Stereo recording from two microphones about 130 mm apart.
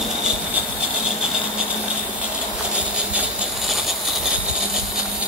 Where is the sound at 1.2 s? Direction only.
5° right (ahead or behind).